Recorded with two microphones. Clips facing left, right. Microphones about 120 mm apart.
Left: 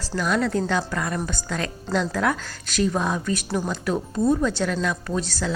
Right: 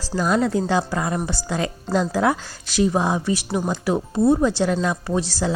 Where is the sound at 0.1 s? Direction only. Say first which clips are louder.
Right 3 dB; 25° right (ahead or behind).